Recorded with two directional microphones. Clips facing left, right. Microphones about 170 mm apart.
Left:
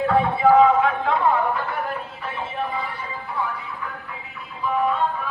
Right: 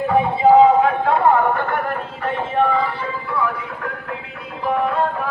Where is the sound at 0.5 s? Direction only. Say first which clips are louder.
Right 5 dB; 35° right (ahead or behind).